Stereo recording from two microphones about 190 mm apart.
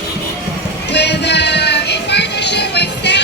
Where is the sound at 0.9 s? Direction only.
65° left (ahead or behind).